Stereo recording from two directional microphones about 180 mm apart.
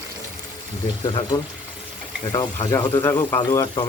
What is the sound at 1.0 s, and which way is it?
Speech, 25° left (ahead or behind).